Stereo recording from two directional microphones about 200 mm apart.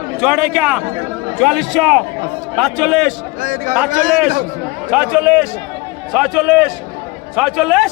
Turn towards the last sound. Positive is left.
turn(degrees=0)  # may be behind; listen again after turning